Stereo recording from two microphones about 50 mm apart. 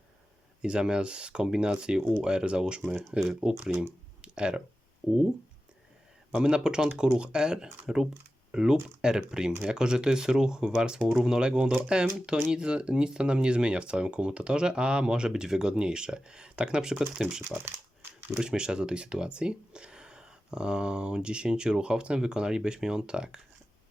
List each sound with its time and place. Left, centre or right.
0.6 s speech: centre
4.2 s a sound: centre
5.0 s speech: centre
6.4 s speech: centre
18.0 s a sound: right
18.3 s speech: centre